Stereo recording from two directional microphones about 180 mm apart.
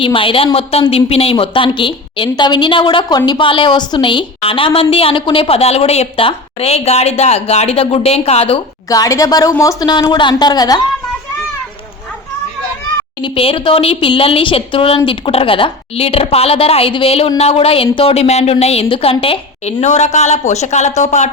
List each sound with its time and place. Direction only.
0.0 s a woman's voice: 30° left (ahead or behind)
8.9 s a woman's voice: 20° left (ahead or behind)
13.2 s a woman's voice: 30° left (ahead or behind)